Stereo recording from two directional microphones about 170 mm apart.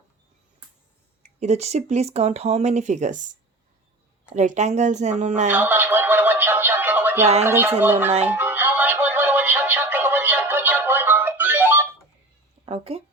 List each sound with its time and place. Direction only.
1.2 s speech: 40° right (ahead or behind)
4.4 s a woman's voice: 45° right (ahead or behind)
5.5 s music: 10° right (ahead or behind)
7.4 s speech: 15° right (ahead or behind)
8.3 s music: 10° right (ahead or behind)
12.6 s speech: 35° right (ahead or behind)